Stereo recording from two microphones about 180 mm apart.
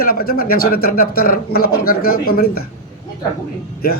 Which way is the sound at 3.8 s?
55° left (ahead or behind).